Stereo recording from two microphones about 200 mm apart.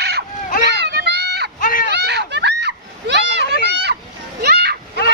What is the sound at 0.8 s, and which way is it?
Children playing, 55° right (ahead or behind).